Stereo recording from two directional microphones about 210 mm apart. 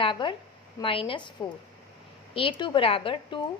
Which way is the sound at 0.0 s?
25° left (ahead or behind).